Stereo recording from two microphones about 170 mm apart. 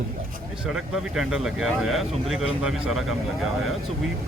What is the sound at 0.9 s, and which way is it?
Speech, 5° right (ahead or behind).